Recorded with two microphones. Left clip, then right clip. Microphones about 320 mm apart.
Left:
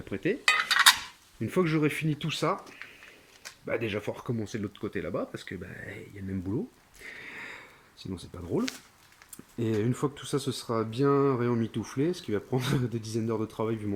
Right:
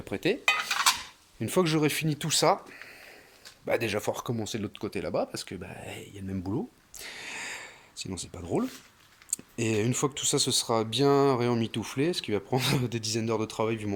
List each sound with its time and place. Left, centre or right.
0.0 s stir: centre
1.4 s speech: centre
3.7 s speech: centre
7.0 s a sound: centre
8.1 s speech: centre